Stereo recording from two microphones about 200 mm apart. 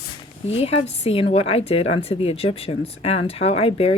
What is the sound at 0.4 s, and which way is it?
A woman's voice, 30° left (ahead or behind).